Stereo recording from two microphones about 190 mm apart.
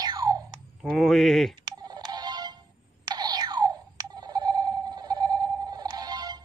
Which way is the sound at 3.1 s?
20° right (ahead or behind).